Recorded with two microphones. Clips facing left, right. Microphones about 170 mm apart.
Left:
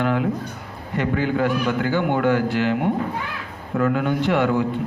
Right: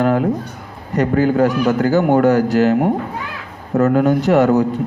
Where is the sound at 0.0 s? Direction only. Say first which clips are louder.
Right 6 dB; 40° right (ahead or behind).